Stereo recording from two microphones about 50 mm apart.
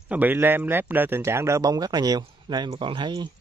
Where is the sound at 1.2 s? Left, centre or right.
Right.